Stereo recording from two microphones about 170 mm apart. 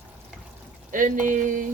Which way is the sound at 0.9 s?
50° right (ahead or behind).